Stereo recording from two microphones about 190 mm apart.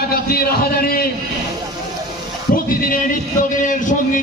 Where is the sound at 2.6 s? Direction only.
45° left (ahead or behind).